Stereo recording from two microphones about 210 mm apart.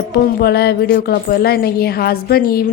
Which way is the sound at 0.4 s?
50° left (ahead or behind).